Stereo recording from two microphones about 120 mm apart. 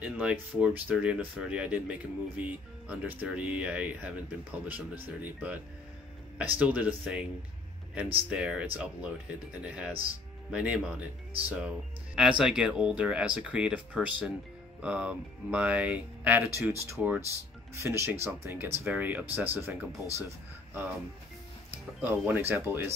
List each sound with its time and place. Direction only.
0.0 s speech: 10° right (ahead or behind)
8.3 s speech: 10° right (ahead or behind)
17.7 s speech: 20° right (ahead or behind)
22.0 s speech: 20° right (ahead or behind)